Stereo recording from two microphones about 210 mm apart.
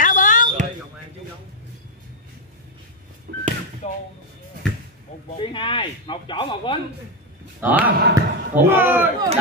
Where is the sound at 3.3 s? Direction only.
50° right (ahead or behind).